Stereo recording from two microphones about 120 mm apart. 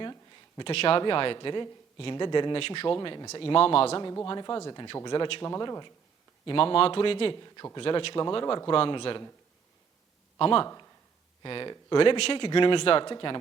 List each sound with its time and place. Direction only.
0.0 s a sound: 35° left (ahead or behind)
0.6 s speech: 55° left (ahead or behind)
4.3 s speech: 35° left (ahead or behind)
6.4 s speech: 45° left (ahead or behind)
7.4 s speech: 30° left (ahead or behind)
7.8 s speech: 50° left (ahead or behind)
10.3 s speech: 45° left (ahead or behind)